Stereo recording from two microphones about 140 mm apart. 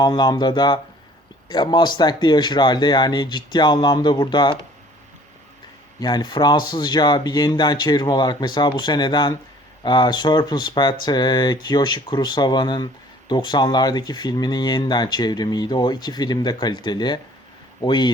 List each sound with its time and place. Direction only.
0.0 s speech: 30° left (ahead or behind)
6.0 s speech: 30° left (ahead or behind)